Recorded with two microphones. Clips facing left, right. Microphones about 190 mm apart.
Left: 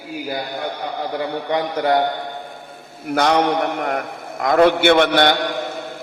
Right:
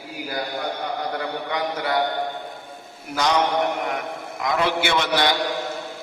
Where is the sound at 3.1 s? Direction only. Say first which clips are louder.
Left 5 dB; 60° left (ahead or behind).